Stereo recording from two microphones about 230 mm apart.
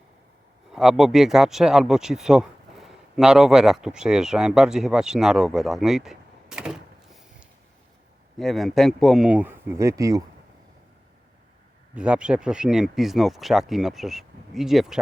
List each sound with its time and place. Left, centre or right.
0.7 s speech: centre
11.9 s speech: centre